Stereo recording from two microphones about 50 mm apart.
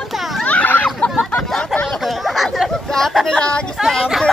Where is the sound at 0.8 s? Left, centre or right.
Centre.